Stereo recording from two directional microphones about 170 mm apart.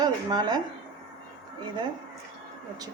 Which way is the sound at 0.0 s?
25° right (ahead or behind).